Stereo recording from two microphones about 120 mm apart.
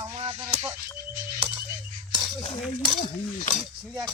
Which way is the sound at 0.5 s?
65° right (ahead or behind).